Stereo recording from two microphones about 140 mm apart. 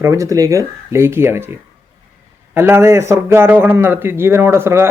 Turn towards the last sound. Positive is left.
turn(degrees=-15)  # may be behind; listen again after turning